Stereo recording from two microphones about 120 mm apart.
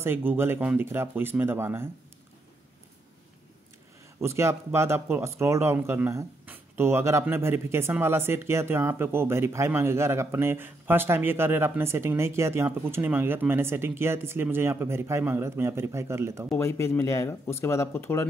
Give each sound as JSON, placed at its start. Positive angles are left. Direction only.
{"t": 0.0, "sound": "speech", "side_deg": -20}
{"t": 4.2, "sound": "speech", "side_deg": -25}
{"t": 16.5, "sound": "speech", "side_deg": 20}